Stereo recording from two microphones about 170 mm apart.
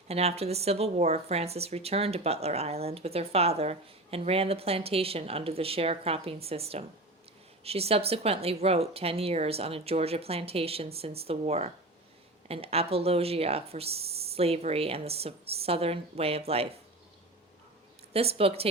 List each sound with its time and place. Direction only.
0.1 s a woman's voice: 35° right (ahead or behind)
18.1 s a woman's voice: 35° right (ahead or behind)